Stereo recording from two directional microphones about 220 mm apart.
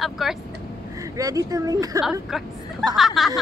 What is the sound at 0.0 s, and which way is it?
Vehicle, centre (ahead or behind).